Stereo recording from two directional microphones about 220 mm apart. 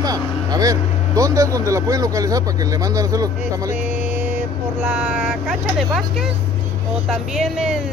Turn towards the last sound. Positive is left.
turn(degrees=0)  # may be behind; listen again after turning